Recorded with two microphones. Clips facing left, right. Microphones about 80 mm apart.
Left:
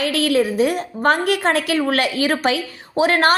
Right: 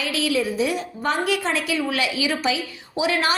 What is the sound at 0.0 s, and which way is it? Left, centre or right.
A woman's voice, left.